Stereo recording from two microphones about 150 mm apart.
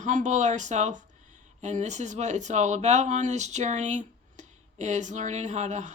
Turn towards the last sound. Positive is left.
turn(degrees=-50)  # may be behind; listen again after turning